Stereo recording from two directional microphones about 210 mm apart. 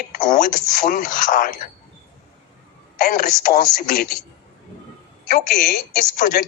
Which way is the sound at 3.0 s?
45° left (ahead or behind).